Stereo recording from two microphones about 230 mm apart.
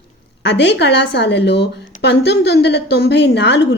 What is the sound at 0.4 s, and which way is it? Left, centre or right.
Speech, left.